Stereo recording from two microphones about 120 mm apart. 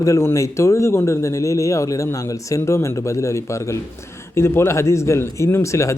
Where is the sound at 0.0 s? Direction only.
25° left (ahead or behind).